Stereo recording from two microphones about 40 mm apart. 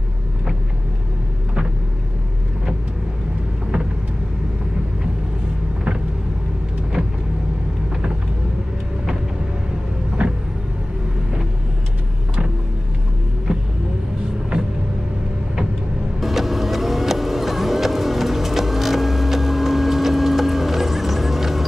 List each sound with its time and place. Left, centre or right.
10.2 s vehicle: right
13.5 s vehicle: centre
16.2 s vehicle: centre